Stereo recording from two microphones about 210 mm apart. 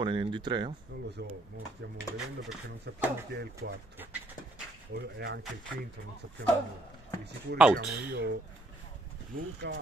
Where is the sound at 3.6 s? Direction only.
55° right (ahead or behind).